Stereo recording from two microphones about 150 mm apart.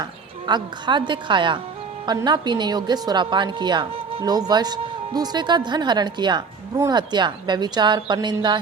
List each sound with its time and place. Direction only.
0.0 s a woman's voice: 30° right (ahead or behind)